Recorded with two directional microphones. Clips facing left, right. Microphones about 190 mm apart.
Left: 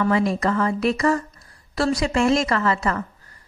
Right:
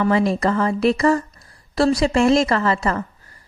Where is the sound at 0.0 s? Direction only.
25° right (ahead or behind).